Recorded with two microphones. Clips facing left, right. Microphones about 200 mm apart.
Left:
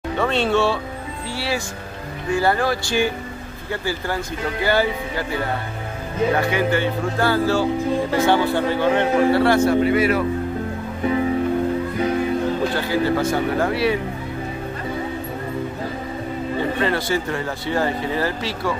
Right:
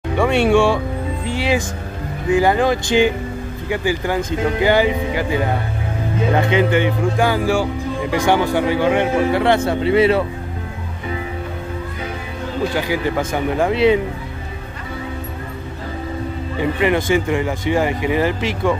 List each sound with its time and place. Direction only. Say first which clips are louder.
0.2 s a man's voice: right 5 dB; 10° right (ahead or behind)
12.7 s a man's voice: even; 15° right (ahead or behind)
16.8 s a man's voice: right 5 dB; 15° right (ahead or behind)